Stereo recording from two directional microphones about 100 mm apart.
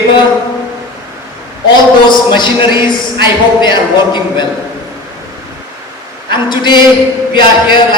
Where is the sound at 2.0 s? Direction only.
50° left (ahead or behind).